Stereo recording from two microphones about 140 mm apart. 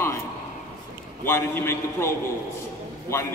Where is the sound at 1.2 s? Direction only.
15° left (ahead or behind).